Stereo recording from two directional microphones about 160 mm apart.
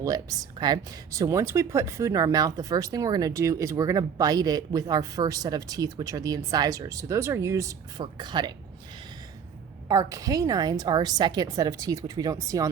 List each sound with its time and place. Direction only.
0.0 s speech: 20° right (ahead or behind)
9.9 s speech: 20° right (ahead or behind)